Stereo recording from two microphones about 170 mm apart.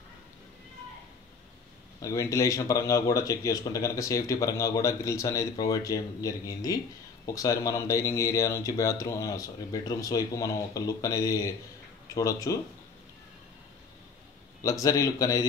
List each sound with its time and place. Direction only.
2.0 s speech: 20° left (ahead or behind)
14.6 s speech: 20° left (ahead or behind)